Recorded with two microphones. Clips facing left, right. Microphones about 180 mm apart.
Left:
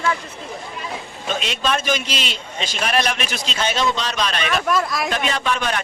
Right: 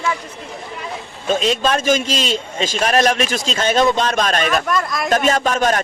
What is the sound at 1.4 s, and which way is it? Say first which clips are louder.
A man's voice: right 5 dB; 40° right (ahead or behind).